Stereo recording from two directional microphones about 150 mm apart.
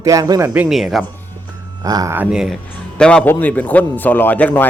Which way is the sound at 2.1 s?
5° right (ahead or behind).